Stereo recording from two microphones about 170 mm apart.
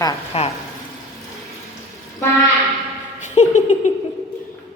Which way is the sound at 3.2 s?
45° left (ahead or behind).